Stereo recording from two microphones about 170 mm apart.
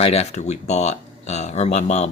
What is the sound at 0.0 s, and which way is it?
Speech, 35° left (ahead or behind).